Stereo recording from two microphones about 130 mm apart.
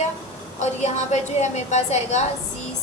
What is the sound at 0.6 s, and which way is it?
A woman's voice, 60° left (ahead or behind).